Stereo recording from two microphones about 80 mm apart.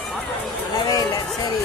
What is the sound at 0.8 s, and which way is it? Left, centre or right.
Speech, left.